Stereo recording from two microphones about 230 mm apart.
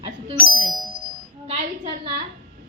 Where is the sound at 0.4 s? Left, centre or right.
Centre.